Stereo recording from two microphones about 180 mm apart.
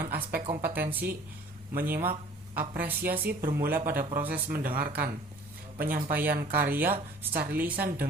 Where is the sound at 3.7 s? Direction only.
50° right (ahead or behind).